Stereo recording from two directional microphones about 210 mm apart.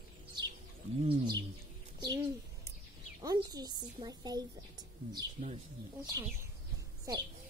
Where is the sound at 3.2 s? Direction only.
20° right (ahead or behind).